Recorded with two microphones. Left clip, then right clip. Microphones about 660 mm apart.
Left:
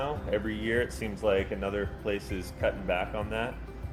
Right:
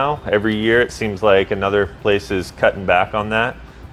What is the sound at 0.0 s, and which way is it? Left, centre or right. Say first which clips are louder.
Speech: right 14 dB; right.